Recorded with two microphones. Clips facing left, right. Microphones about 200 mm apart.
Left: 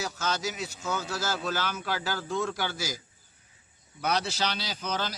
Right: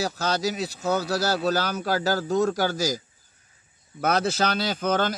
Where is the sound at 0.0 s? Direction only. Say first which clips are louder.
Right 6 dB; 35° right (ahead or behind).